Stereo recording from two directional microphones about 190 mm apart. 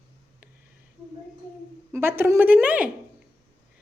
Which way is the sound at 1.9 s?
10° right (ahead or behind).